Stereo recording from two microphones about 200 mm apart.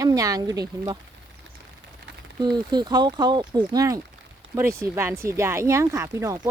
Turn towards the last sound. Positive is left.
turn(degrees=-15)  # may be behind; listen again after turning